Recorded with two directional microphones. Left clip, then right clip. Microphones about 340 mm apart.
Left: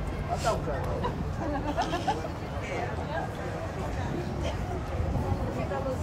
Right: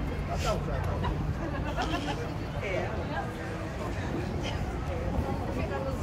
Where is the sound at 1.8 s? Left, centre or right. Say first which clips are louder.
Left 3 dB; left.